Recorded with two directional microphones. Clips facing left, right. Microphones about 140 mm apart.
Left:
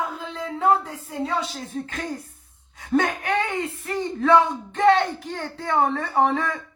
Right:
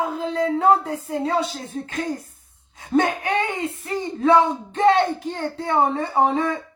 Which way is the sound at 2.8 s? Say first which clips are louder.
Right 2 dB; 20° right (ahead or behind).